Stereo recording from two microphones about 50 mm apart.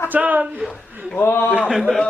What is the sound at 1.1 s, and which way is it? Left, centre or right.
Speech, left.